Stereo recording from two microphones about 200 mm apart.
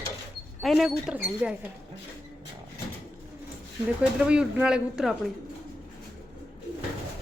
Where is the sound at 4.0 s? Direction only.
5° right (ahead or behind).